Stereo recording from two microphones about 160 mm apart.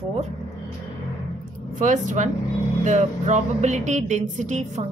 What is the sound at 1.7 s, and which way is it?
Speech, 55° right (ahead or behind).